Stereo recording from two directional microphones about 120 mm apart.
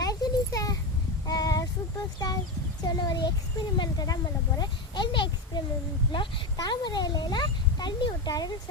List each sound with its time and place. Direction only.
0.0 s a sound: 30° left (ahead or behind)
1.3 s child singing: 30° left (ahead or behind)
2.8 s speech: 35° left (ahead or behind)